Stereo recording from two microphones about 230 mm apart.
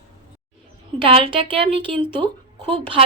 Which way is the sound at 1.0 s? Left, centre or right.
Right.